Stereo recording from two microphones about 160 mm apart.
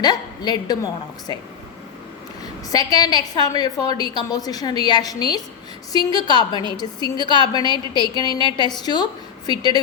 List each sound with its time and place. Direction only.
0.0 s a woman's voice: 25° left (ahead or behind)
2.4 s a woman's voice: 25° left (ahead or behind)